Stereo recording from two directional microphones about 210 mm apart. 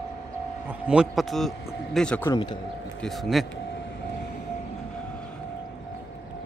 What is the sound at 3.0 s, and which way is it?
Speech, centre (ahead or behind).